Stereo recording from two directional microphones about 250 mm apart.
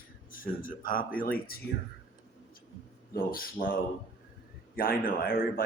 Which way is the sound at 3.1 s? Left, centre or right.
Left.